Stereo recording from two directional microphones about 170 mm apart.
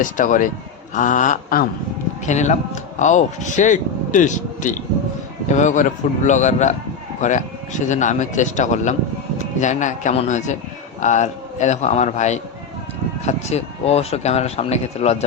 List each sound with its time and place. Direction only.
0.0 s speech: 50° left (ahead or behind)